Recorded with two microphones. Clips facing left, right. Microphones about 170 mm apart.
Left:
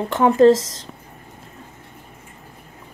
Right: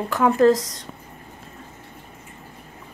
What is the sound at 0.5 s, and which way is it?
Speech, 90° left.